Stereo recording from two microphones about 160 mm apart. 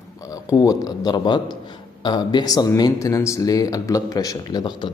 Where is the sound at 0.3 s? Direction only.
20° left (ahead or behind).